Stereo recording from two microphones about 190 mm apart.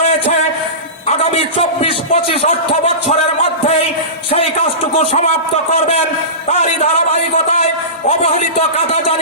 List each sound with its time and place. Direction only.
1.0 s a man's voice: 35° left (ahead or behind)
4.3 s a man's voice: 35° left (ahead or behind)
6.5 s a man's voice: 35° left (ahead or behind)